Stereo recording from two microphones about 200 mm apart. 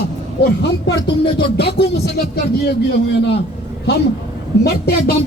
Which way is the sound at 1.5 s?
55° left (ahead or behind).